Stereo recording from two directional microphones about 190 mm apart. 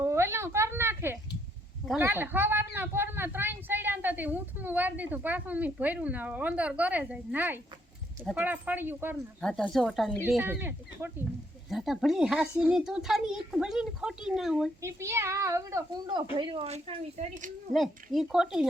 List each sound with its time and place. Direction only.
0.0 s a sound: 15° right (ahead or behind)
1.9 s speech: 10° right (ahead or behind)
9.4 s a child's voice: 5° left (ahead or behind)
10.3 s speech: 10° right (ahead or behind)
11.7 s a child's voice: centre (ahead or behind)
14.8 s speech: 15° right (ahead or behind); by 17.5 s 40° right (ahead or behind)
17.7 s a child's voice: centre (ahead or behind)